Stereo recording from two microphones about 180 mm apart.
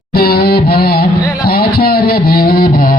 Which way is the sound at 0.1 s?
60° left (ahead or behind).